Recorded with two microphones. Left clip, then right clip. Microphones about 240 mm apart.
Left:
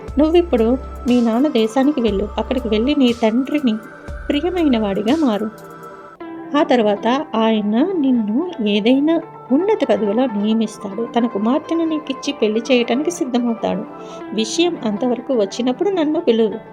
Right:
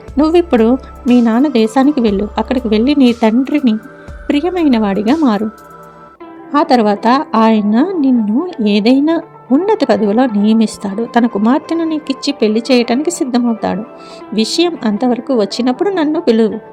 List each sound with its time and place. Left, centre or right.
0.2 s a woman's voice: right
6.5 s a woman's voice: right